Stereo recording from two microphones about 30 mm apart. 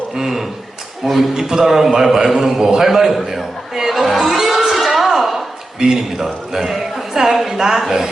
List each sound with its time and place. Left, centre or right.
0.2 s a man's voice: centre
1.4 s a man's voice: centre
4.4 s a sound: centre
5.8 s a man's voice: centre